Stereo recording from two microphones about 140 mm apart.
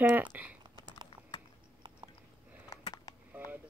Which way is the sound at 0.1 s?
10° right (ahead or behind).